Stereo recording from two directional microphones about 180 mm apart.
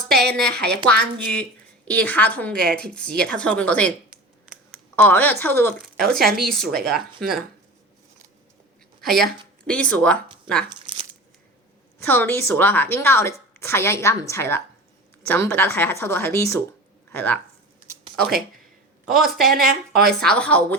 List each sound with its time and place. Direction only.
0.1 s a woman's voice: 5° left (ahead or behind)
4.1 s a sound: centre (ahead or behind)
4.9 s a woman's voice: 10° left (ahead or behind)
9.0 s a woman's voice: centre (ahead or behind)
10.7 s crumpling: 30° right (ahead or behind)
12.0 s a woman's voice: 10° left (ahead or behind)